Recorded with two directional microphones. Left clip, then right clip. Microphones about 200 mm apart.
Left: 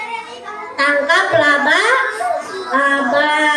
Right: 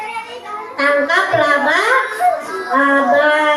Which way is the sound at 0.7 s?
40° left (ahead or behind).